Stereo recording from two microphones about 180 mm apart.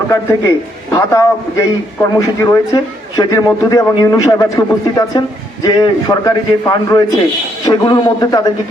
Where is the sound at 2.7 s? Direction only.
20° left (ahead or behind).